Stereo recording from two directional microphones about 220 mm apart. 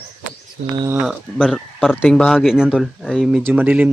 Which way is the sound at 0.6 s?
55° right (ahead or behind).